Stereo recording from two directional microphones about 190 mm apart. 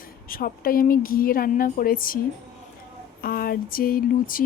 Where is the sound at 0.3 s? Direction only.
50° left (ahead or behind).